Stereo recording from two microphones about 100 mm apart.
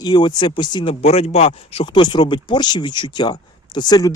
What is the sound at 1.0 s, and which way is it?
Speech, 90° left.